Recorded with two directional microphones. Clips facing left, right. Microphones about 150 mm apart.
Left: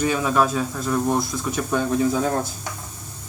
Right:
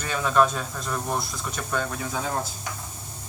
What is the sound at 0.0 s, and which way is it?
Speech, 10° left (ahead or behind).